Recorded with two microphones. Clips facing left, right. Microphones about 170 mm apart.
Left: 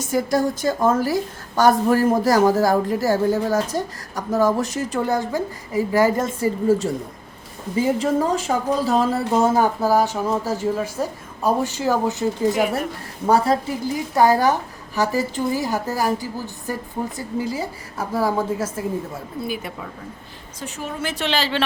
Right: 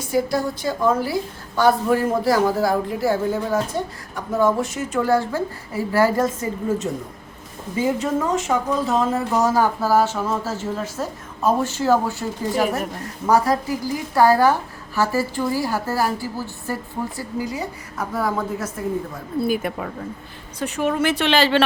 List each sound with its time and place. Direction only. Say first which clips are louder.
0.0 s a woman's voice: left 1 dB; 45° left (ahead or behind)
5.0 s a woman's voice: right 2 dB; 15° left (ahead or behind)
7.9 s a woman's voice: left 2 dB; 30° left (ahead or behind)
9.6 s a woman's voice: even; 15° left (ahead or behind)
13.2 s a woman's voice: even; 25° left (ahead or behind)
17.2 s a woman's voice: left 3 dB; 30° left (ahead or behind)
19.4 s speech: right 7 dB; 50° right (ahead or behind)
20.6 s speech: right 8 dB; 65° right (ahead or behind)